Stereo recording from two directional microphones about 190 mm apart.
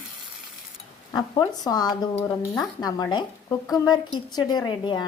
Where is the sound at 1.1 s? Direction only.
20° left (ahead or behind).